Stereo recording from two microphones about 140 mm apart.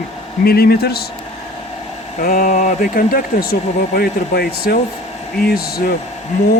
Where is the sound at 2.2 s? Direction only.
90° left.